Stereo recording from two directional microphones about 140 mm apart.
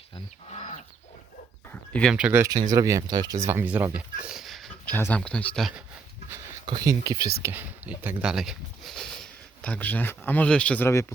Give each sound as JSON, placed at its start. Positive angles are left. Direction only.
{"t": 1.7, "sound": "a sound", "side_deg": 10}
{"t": 2.1, "sound": "speech", "side_deg": -10}
{"t": 2.4, "sound": "speech", "side_deg": -25}
{"t": 4.9, "sound": "speech", "side_deg": 10}
{"t": 6.7, "sound": "speech", "side_deg": -25}
{"t": 7.4, "sound": "speech", "side_deg": -15}